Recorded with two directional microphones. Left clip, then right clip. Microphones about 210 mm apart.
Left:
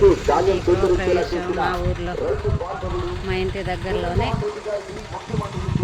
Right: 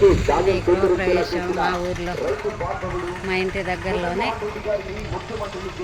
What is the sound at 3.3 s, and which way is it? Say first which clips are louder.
Speech: right 2 dB; centre (ahead or behind).